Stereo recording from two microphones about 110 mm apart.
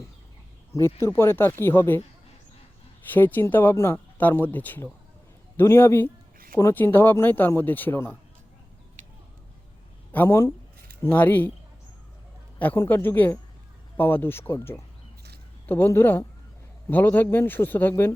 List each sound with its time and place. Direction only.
0.7 s speech: 25° left (ahead or behind)
3.1 s speech: 15° left (ahead or behind)
10.1 s speech: 20° left (ahead or behind)
12.5 s speech: 15° left (ahead or behind)